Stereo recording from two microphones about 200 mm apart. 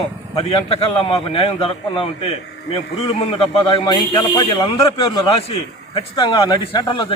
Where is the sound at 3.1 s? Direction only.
25° left (ahead or behind).